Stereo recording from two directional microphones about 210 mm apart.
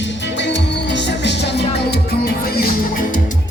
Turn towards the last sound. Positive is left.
turn(degrees=45)  # may be behind; listen again after turning